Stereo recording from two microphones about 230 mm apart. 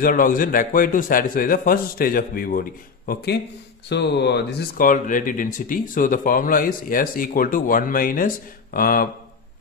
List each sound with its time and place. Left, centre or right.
0.0 s speech: left